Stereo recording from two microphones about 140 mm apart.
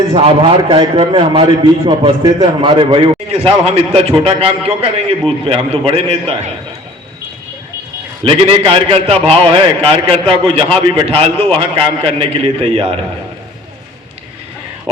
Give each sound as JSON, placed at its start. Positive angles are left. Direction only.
{"t": 0.1, "sound": "a man's voice", "side_deg": -45}
{"t": 8.2, "sound": "a man's voice", "side_deg": -40}